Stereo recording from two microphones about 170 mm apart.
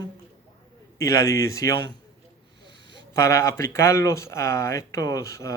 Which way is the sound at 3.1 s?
15° left (ahead or behind).